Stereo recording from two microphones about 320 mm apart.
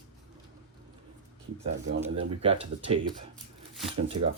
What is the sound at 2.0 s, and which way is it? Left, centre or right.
Speech, centre.